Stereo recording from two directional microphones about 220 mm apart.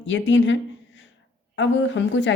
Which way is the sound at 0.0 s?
60° left (ahead or behind).